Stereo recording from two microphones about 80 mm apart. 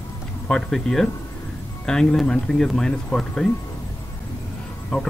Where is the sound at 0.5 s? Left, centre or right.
Centre.